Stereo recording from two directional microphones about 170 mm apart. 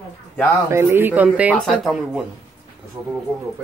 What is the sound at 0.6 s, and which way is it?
Speech, 15° right (ahead or behind).